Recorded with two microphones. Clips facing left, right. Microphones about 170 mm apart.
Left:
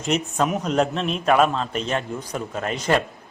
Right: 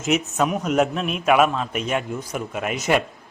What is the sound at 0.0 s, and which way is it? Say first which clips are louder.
A man's voice: right 1 dB; 5° right (ahead or behind).